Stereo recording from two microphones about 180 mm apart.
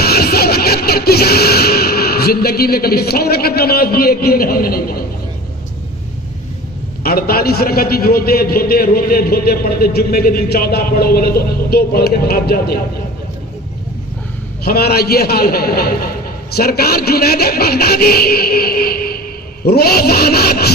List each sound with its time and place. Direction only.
0.0 s music: 60° left (ahead or behind)
7.0 s a man's voice: 55° left (ahead or behind)
14.6 s a man's voice: 60° left (ahead or behind)
19.6 s a sound: 60° left (ahead or behind)